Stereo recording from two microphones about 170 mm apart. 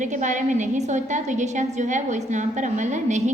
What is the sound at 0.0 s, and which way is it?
A woman's voice, 45° right (ahead or behind).